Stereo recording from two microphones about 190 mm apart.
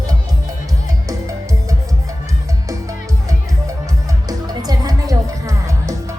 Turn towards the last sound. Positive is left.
turn(degrees=-15)  # may be behind; listen again after turning